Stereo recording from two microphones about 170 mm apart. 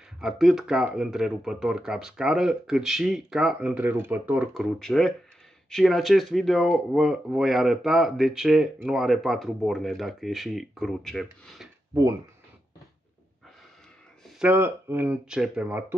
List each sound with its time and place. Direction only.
0.2 s speech: centre (ahead or behind)
4.7 s speech: 5° left (ahead or behind)
11.9 s speech: 15° right (ahead or behind)
14.2 s speech: 5° right (ahead or behind)